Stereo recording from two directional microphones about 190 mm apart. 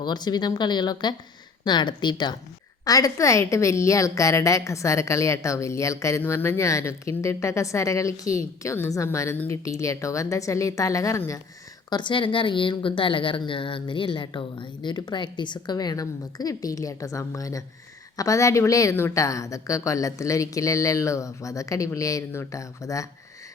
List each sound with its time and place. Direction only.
0.0 s a woman's voice: 20° left (ahead or behind)